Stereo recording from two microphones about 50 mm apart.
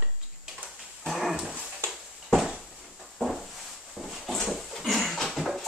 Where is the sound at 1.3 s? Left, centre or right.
Centre.